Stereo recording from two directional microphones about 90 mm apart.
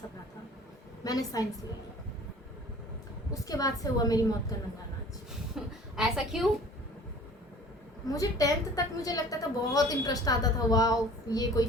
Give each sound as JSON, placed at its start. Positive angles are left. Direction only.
{"t": 1.0, "sound": "a woman's voice", "side_deg": 45}
{"t": 3.4, "sound": "a woman's voice", "side_deg": 40}
{"t": 5.5, "sound": "a woman's voice", "side_deg": -5}
{"t": 8.0, "sound": "a woman's voice", "side_deg": 40}